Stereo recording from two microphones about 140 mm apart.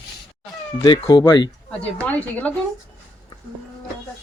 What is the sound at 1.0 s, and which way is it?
Speech, 30° left (ahead or behind).